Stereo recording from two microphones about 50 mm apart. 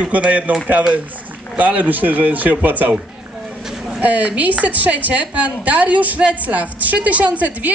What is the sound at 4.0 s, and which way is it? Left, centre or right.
A woman's voice, right.